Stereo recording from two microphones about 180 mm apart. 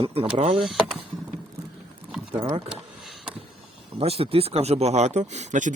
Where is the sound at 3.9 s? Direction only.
35° right (ahead or behind).